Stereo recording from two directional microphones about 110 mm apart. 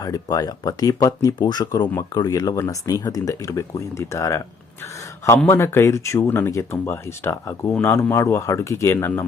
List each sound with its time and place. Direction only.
0.0 s speech: 35° left (ahead or behind)
5.5 s speech: 20° left (ahead or behind)